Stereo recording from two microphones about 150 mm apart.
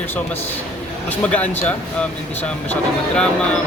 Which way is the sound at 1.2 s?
10° left (ahead or behind).